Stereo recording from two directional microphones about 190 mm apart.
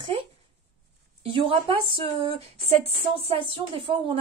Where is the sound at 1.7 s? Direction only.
30° right (ahead or behind).